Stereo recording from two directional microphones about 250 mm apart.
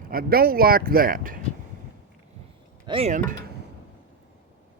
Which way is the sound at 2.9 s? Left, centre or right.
Right.